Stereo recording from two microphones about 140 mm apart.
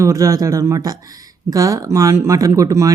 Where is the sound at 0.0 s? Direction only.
25° right (ahead or behind).